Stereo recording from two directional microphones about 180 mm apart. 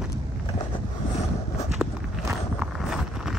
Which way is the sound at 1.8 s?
5° right (ahead or behind).